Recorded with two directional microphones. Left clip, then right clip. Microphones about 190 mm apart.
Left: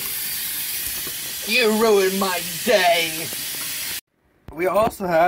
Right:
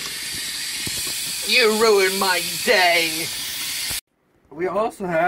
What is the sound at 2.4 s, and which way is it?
Hiss, 40° left (ahead or behind).